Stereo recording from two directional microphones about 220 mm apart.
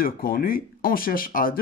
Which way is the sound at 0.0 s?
40° left (ahead or behind).